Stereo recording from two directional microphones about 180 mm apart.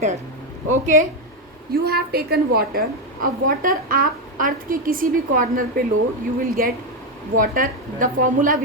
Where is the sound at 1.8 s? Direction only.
60° right (ahead or behind).